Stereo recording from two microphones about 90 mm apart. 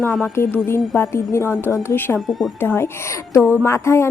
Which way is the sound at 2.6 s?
25° left (ahead or behind).